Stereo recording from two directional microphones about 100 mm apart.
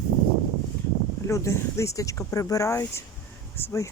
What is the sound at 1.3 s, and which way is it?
Speech, 30° left (ahead or behind).